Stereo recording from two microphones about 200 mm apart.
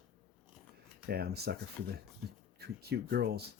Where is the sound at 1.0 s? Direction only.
50° right (ahead or behind).